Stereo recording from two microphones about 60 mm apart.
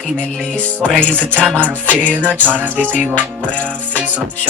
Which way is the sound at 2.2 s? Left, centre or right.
Right.